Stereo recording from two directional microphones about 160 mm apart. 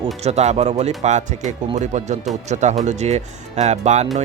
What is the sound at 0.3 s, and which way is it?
Speech, 40° right (ahead or behind).